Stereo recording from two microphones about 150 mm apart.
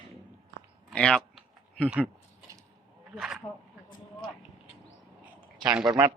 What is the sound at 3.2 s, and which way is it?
Speech, 5° right (ahead or behind).